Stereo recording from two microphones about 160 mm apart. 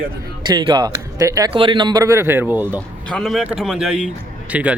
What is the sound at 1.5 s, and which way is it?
Speech, 30° right (ahead or behind).